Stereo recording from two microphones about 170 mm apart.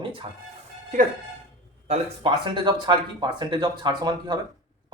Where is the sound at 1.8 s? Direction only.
35° right (ahead or behind).